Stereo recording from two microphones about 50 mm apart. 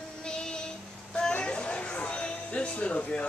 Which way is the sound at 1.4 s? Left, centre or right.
Left.